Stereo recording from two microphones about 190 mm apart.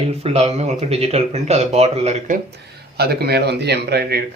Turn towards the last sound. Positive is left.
turn(degrees=-60)  # may be behind; listen again after turning